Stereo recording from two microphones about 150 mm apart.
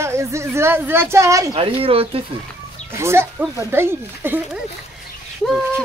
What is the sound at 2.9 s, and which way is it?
Speech, 15° right (ahead or behind).